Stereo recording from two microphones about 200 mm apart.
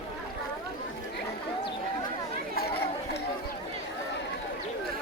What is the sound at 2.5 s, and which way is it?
Chatter, 50° left (ahead or behind).